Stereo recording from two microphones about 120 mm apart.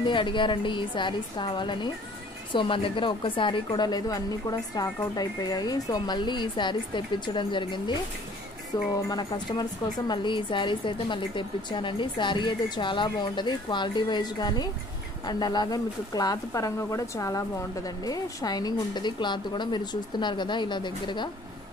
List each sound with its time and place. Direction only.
0.0 s a woman's voice: 45° left (ahead or behind)